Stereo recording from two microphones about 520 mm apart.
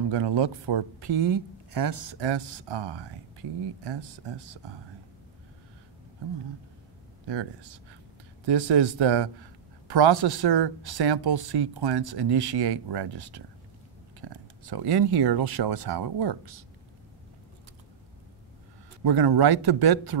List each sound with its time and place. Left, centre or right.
0.1 s speech: right
8.5 s speech: right
19.0 s speech: right